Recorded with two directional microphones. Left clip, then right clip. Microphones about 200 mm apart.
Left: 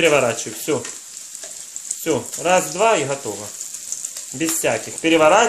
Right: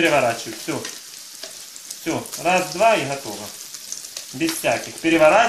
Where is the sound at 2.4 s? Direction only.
50° left (ahead or behind).